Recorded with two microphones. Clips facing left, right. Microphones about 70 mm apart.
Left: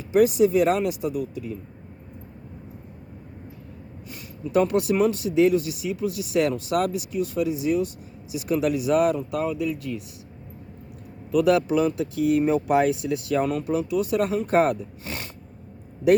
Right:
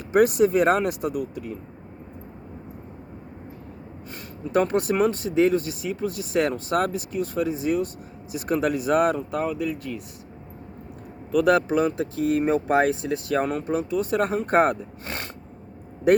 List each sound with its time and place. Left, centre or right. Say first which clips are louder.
0.1 s speech: even; right
4.5 s speech: left 1 dB; right
11.3 s speech: even; right